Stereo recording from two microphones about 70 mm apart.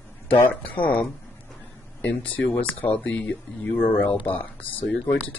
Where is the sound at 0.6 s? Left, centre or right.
Left.